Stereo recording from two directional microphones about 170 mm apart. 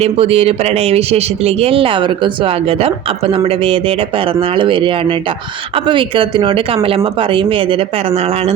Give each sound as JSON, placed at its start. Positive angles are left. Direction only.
{"t": 0.0, "sound": "speech", "side_deg": -35}